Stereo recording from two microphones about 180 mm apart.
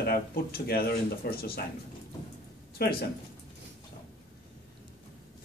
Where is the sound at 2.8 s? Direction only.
60° left (ahead or behind).